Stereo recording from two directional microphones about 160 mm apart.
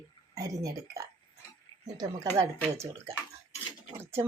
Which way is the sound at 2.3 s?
20° right (ahead or behind).